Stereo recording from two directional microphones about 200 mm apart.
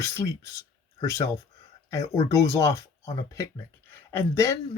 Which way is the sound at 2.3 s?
15° left (ahead or behind).